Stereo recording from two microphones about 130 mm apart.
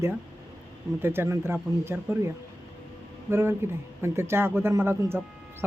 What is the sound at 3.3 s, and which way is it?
Speech, 20° right (ahead or behind).